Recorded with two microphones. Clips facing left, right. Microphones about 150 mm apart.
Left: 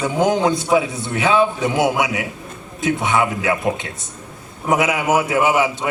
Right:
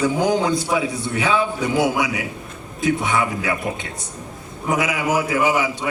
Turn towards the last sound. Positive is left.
turn(degrees=25)  # may be behind; listen again after turning